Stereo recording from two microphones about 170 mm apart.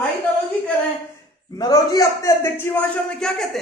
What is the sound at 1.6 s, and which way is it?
A man's voice, 20° left (ahead or behind).